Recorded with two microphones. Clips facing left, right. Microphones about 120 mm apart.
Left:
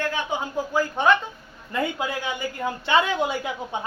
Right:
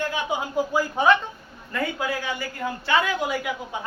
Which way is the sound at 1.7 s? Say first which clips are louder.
Left 1 dB; 20° left (ahead or behind).